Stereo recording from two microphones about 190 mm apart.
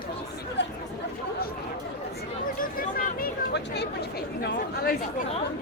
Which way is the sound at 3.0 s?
55° left (ahead or behind).